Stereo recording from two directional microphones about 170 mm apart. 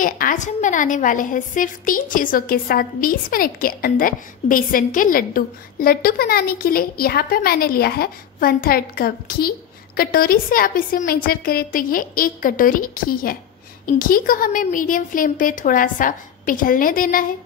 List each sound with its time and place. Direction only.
0.0 s a woman's voice: 50° left (ahead or behind)